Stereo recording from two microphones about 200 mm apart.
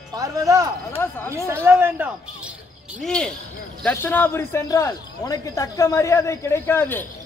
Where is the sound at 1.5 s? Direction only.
10° right (ahead or behind).